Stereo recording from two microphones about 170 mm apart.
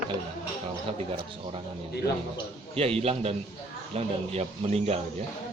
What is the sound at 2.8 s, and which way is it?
A man's voice, 35° right (ahead or behind).